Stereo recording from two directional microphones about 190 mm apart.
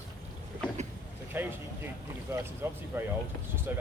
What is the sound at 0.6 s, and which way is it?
Speech, 5° left (ahead or behind).